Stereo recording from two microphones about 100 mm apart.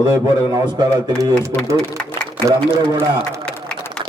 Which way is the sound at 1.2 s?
35° right (ahead or behind).